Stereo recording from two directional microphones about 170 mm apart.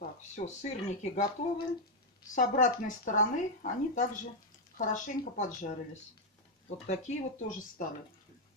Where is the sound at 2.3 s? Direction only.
50° left (ahead or behind).